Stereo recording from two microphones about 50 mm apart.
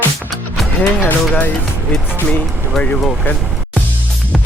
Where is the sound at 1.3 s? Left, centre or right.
Left.